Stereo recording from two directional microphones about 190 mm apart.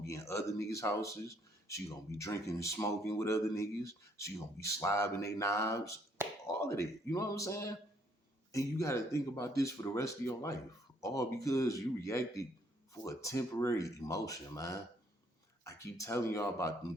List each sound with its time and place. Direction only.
0.1 s speech: 15° left (ahead or behind)